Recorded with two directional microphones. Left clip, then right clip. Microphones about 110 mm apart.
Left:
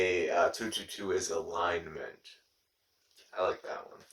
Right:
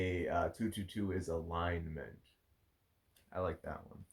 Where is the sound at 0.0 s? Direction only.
15° left (ahead or behind).